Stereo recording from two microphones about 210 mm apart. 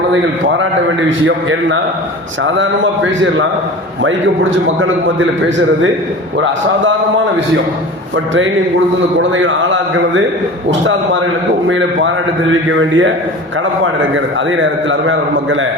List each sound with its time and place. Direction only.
1.2 s a man's voice: 70° right (ahead or behind)
8.1 s a man's voice: 65° right (ahead or behind)
14.5 s a man's voice: 65° right (ahead or behind)